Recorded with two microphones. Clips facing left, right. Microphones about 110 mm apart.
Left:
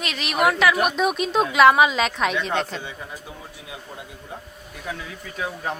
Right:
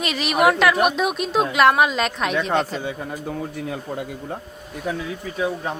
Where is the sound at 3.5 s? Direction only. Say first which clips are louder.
Right 10 dB; 55° right (ahead or behind).